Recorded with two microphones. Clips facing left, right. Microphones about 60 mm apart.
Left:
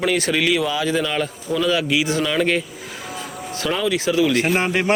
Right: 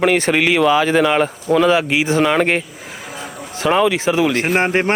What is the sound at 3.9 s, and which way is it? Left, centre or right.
Speech, right.